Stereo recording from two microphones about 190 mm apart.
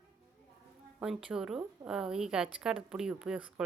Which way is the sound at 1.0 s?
5° right (ahead or behind).